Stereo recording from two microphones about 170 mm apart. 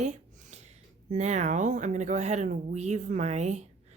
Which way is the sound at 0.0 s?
45° right (ahead or behind).